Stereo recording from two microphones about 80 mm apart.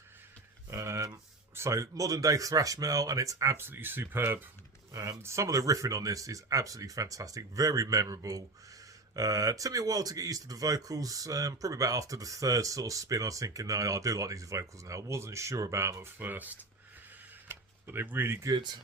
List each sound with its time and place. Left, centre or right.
0.7 s a sound: right
1.5 s speech: right
3.6 s speech: right
4.9 s speech: right
16.1 s speech: right
17.5 s a sound: right
18.5 s speech: right